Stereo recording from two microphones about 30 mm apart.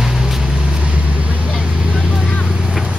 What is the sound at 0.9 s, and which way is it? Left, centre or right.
Vehicle, right.